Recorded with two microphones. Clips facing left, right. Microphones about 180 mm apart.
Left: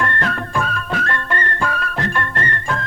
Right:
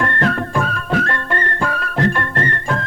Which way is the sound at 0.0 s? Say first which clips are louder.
Right 3 dB; 40° right (ahead or behind).